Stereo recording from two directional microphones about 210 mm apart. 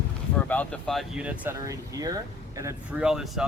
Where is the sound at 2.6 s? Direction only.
5° right (ahead or behind).